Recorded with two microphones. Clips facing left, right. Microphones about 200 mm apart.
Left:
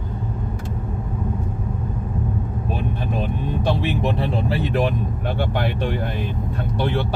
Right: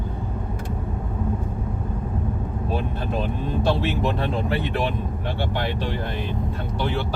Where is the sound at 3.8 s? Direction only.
15° left (ahead or behind).